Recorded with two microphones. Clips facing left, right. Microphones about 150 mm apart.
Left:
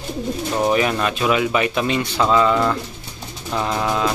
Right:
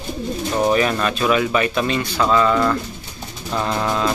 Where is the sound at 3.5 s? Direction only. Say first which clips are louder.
Even; 5° left (ahead or behind).